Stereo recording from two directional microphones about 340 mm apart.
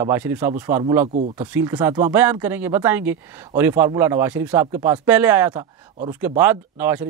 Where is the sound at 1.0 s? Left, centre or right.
Right.